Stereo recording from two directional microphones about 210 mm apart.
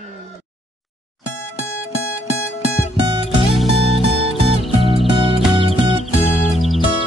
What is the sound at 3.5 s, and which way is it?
Music, centre (ahead or behind).